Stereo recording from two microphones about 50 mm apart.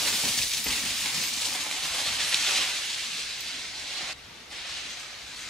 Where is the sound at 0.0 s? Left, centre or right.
Centre.